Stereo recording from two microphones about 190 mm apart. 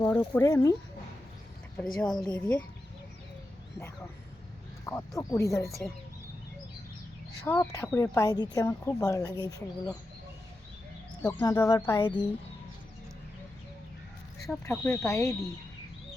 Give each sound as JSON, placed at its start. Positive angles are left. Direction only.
{"t": 0.0, "sound": "a woman's voice", "side_deg": 10}
{"t": 2.0, "sound": "a woman's voice", "side_deg": 20}
{"t": 4.9, "sound": "a woman's voice", "side_deg": 15}
{"t": 7.4, "sound": "a woman's voice", "side_deg": 10}
{"t": 11.2, "sound": "speech", "side_deg": 15}
{"t": 14.6, "sound": "a woman's voice", "side_deg": 15}